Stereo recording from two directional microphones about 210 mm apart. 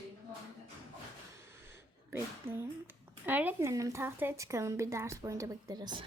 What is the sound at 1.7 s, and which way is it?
A woman's voice, 10° right (ahead or behind).